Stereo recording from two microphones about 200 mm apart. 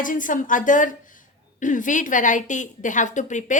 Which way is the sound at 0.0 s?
40° left (ahead or behind).